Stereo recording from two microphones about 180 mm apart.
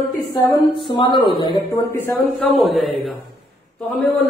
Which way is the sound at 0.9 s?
25° left (ahead or behind).